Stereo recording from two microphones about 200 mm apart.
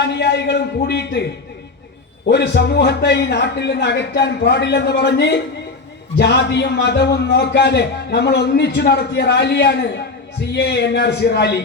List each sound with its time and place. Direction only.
0.1 s a man's voice: 60° left (ahead or behind)
2.2 s a man's voice: 60° left (ahead or behind)